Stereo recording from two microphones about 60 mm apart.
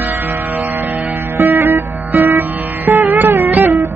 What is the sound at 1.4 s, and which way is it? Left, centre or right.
Music, right.